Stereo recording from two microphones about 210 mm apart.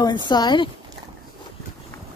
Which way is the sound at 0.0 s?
20° left (ahead or behind).